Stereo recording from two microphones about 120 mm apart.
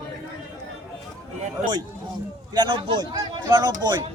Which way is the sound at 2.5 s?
40° right (ahead or behind).